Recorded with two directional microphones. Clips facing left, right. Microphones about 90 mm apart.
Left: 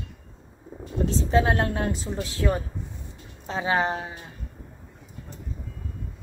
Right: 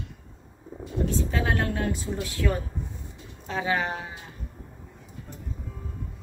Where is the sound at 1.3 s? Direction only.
25° left (ahead or behind).